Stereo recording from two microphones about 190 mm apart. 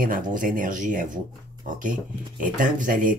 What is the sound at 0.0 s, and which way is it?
Speech, 45° right (ahead or behind).